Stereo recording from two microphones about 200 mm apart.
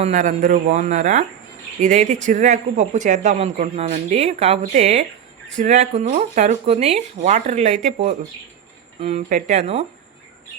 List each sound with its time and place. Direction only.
0.0 s speech: 35° right (ahead or behind)